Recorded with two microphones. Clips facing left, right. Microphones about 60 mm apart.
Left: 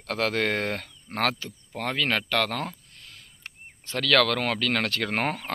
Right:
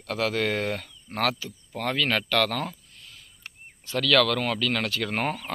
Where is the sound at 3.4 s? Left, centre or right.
Left.